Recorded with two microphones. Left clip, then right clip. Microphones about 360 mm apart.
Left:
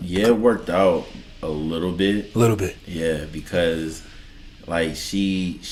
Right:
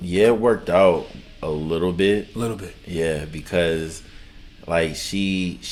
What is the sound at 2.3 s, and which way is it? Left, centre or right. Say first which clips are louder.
Speech: left 8 dB; left.